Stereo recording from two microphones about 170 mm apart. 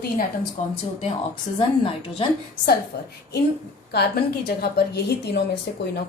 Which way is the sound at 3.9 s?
70° left (ahead or behind).